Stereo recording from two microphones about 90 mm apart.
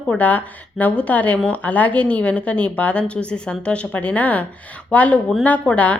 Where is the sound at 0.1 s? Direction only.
15° left (ahead or behind).